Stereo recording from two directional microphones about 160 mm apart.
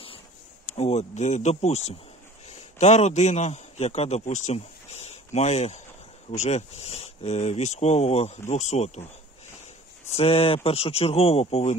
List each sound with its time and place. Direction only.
0.7 s a man's voice: 40° left (ahead or behind)
10.1 s speech: 40° left (ahead or behind)